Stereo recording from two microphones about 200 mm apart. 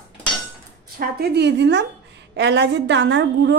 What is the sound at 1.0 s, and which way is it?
Speech, 50° right (ahead or behind).